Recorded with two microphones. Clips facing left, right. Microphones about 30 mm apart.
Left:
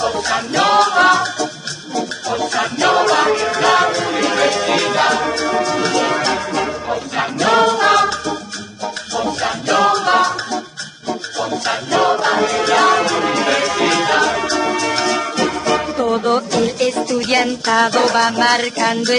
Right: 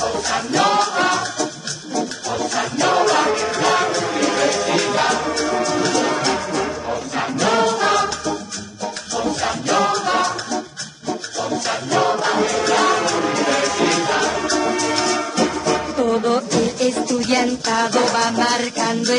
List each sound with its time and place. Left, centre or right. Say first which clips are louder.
0.0 s music: left 3 dB; left
0.3 s music: left 2 dB; left
1.1 s music: left 4 dB; left
2.9 s music: left 3 dB; left
9.2 s music: left 1 dB; left
16.3 s a sound: left 2 dB; centre
16.8 s music: left 2 dB; left
17.9 s music: left 3 dB; left
18.4 s music: left 4 dB; left